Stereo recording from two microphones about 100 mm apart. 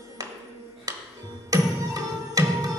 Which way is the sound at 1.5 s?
35° right (ahead or behind).